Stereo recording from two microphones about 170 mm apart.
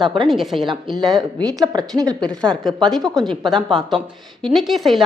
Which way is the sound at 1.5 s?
25° right (ahead or behind).